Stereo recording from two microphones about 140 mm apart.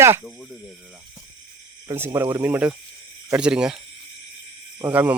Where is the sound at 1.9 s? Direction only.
15° right (ahead or behind).